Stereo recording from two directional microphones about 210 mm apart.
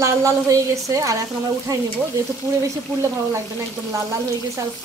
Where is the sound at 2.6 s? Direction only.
15° right (ahead or behind).